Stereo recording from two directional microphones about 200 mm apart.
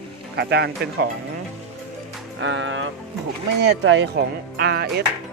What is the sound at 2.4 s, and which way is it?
Speech, 65° right (ahead or behind).